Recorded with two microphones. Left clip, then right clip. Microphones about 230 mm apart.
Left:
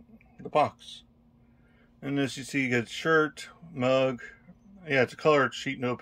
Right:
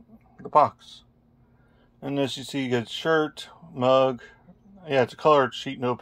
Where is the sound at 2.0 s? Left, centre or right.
Centre.